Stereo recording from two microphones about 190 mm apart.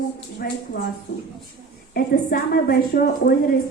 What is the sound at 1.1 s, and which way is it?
A man's voice, 60° left (ahead or behind).